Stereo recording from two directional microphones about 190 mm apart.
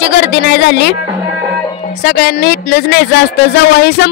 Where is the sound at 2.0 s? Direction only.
60° left (ahead or behind).